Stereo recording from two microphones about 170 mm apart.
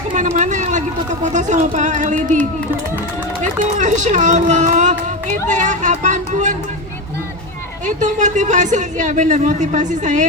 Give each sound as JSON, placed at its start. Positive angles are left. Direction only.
{"t": 0.1, "sound": "speech", "side_deg": -45}
{"t": 3.8, "sound": "speech", "side_deg": -45}
{"t": 7.9, "sound": "speech", "side_deg": -45}